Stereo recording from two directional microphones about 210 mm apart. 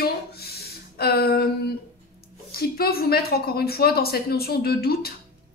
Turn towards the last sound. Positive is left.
turn(degrees=45)  # may be behind; listen again after turning